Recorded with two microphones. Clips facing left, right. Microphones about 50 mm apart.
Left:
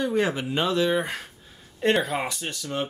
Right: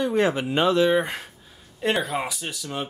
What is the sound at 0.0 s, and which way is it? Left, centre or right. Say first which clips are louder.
Speech: right 2 dB; centre.